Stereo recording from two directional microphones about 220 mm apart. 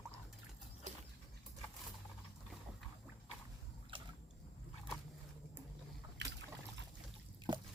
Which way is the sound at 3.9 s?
25° right (ahead or behind).